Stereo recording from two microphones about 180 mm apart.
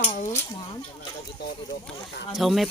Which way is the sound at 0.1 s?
45° left (ahead or behind).